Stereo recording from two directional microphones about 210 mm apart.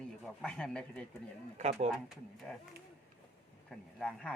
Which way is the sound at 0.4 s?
5° left (ahead or behind).